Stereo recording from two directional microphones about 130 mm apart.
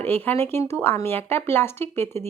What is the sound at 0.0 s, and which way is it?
Speech, 15° left (ahead or behind).